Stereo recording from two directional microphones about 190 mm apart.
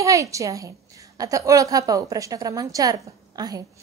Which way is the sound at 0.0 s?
15° right (ahead or behind).